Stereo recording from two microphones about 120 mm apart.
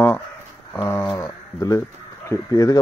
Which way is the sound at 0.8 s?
20° left (ahead or behind).